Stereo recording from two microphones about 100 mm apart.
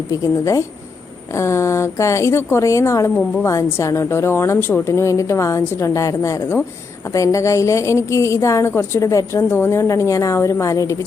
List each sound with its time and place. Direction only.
0.1 s a woman's voice: 30° left (ahead or behind)